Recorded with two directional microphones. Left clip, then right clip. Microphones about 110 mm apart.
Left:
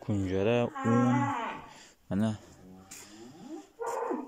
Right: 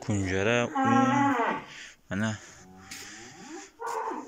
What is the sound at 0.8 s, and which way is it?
Music, 70° left (ahead or behind).